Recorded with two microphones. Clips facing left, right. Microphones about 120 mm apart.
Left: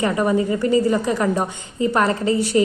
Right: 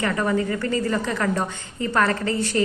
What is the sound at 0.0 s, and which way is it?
A woman's voice, 20° left (ahead or behind).